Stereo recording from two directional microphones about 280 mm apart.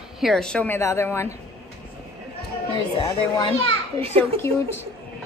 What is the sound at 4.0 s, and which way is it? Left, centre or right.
Speech, right.